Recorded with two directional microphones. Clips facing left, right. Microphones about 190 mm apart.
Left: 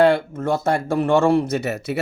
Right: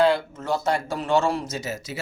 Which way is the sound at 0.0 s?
55° left (ahead or behind).